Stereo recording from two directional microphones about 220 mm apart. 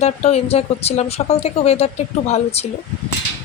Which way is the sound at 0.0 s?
30° left (ahead or behind).